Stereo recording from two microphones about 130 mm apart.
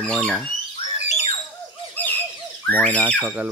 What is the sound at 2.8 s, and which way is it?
Speech, 15° right (ahead or behind).